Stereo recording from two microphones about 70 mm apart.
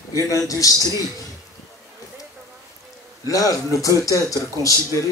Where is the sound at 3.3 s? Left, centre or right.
Left.